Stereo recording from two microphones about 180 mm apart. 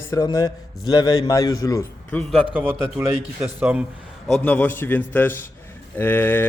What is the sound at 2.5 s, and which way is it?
Speech, 10° right (ahead or behind).